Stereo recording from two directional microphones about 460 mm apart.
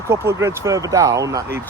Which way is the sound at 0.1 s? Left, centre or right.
Centre.